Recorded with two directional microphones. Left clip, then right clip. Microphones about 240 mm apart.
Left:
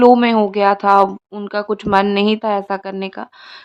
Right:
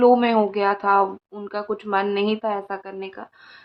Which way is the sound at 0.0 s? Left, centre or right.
Left.